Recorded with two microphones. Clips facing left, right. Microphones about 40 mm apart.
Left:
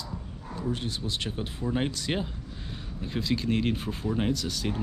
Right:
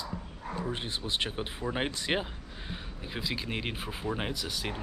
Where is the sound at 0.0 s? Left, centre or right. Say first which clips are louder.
Right 1 dB; right.